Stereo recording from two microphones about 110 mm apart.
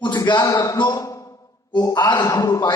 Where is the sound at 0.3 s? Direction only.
35° left (ahead or behind).